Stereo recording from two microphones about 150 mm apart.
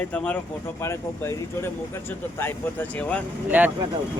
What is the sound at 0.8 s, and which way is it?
Speech, 20° left (ahead or behind).